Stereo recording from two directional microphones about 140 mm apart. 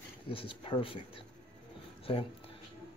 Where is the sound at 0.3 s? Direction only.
40° left (ahead or behind).